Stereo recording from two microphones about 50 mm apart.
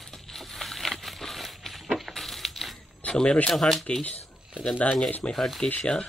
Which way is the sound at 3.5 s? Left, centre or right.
Centre.